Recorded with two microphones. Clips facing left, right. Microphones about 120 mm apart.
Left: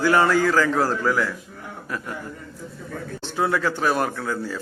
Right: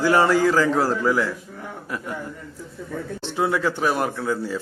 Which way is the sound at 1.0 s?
15° right (ahead or behind).